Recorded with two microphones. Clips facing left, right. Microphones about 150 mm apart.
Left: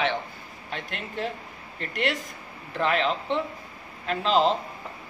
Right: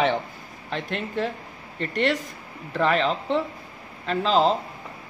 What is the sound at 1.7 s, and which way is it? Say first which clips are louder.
Speech: right 5 dB; 35° right (ahead or behind).